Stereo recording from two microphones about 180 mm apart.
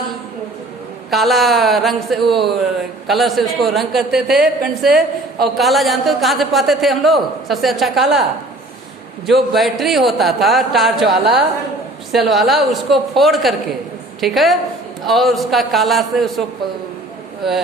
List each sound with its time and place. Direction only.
1.1 s speech: centre (ahead or behind)
9.2 s speech: centre (ahead or behind)
17.4 s speech: centre (ahead or behind)